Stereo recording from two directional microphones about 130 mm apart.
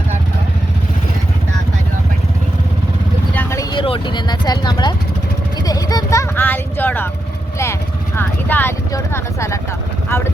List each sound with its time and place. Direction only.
3.3 s vehicle: 20° left (ahead or behind)
3.7 s vehicle: 40° left (ahead or behind); by 8.7 s 15° left (ahead or behind)
8.9 s speech: 20° left (ahead or behind)